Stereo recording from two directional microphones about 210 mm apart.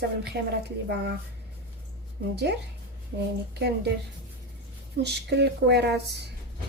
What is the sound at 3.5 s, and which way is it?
Speech, 50° right (ahead or behind).